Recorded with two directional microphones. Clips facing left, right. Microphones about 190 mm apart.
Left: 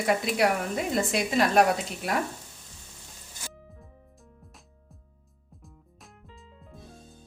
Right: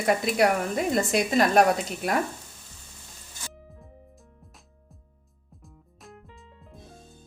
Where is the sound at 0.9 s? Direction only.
45° right (ahead or behind).